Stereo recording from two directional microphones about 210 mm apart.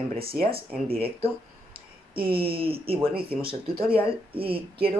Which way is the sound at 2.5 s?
25° right (ahead or behind).